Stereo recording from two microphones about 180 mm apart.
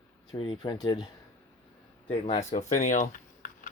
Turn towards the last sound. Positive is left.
turn(degrees=45)  # may be behind; listen again after turning